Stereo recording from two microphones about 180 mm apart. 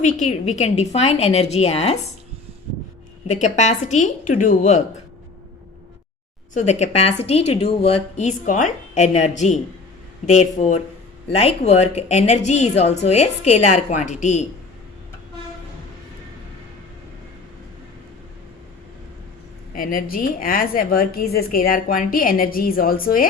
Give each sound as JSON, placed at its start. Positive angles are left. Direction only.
{"t": 0.0, "sound": "a woman's voice", "side_deg": 40}
{"t": 3.2, "sound": "a woman's voice", "side_deg": 40}
{"t": 6.5, "sound": "a woman's voice", "side_deg": 40}
{"t": 19.7, "sound": "a woman's voice", "side_deg": 50}